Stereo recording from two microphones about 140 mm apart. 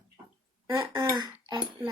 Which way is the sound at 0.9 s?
25° right (ahead or behind).